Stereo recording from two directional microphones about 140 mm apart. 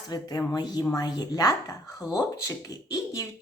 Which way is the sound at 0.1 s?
30° left (ahead or behind).